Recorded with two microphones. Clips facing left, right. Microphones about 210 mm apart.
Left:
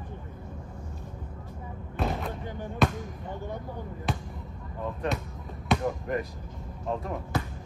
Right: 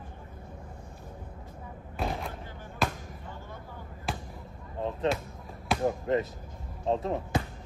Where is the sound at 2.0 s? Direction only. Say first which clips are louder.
Left 3 dB; centre (ahead or behind).